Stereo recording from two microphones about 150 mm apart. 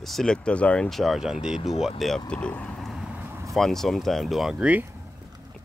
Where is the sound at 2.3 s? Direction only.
10° left (ahead or behind); by 3.6 s 15° right (ahead or behind).